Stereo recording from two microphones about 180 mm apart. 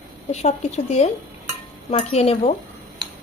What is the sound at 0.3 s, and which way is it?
Speech, 40° left (ahead or behind).